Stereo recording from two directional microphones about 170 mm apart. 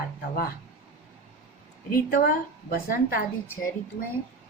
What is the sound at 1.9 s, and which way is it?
Speech, 55° left (ahead or behind).